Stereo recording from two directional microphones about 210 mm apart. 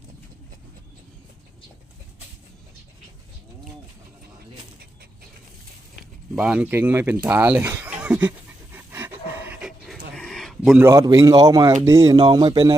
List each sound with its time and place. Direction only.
6.3 s speech: 5° right (ahead or behind)
8.7 s a sound: 10° right (ahead or behind)
10.8 s speech: 15° right (ahead or behind)